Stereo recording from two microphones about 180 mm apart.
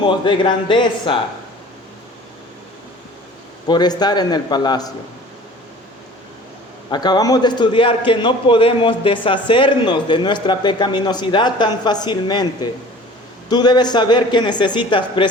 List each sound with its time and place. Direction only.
0.0 s a man's voice: 25° left (ahead or behind)
3.7 s a man's voice: 25° left (ahead or behind)
6.9 s a man's voice: 25° left (ahead or behind)